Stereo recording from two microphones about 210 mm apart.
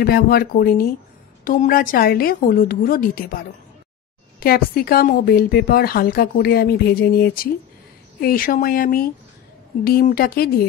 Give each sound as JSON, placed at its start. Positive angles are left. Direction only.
{"t": 0.0, "sound": "a woman's voice", "side_deg": 45}
{"t": 4.4, "sound": "a woman's voice", "side_deg": 45}